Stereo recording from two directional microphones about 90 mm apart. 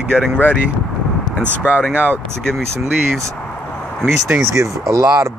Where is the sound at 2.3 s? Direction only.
5° left (ahead or behind).